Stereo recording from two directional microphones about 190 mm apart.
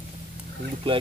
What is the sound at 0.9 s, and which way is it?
Speech, 30° right (ahead or behind).